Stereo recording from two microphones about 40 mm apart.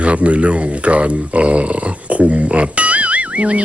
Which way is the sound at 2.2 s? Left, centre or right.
Right.